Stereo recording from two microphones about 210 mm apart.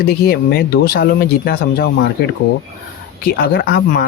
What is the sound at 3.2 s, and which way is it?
Speech, 45° left (ahead or behind).